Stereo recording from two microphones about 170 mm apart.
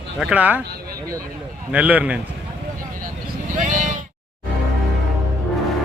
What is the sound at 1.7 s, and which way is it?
Speech, 10° right (ahead or behind).